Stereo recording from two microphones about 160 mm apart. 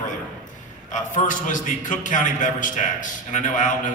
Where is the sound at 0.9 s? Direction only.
50° left (ahead or behind).